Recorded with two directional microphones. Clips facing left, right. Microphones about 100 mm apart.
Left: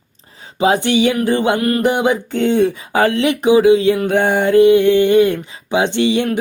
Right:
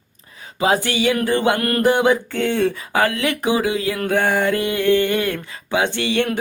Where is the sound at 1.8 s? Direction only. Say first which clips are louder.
Even; 20° left (ahead or behind).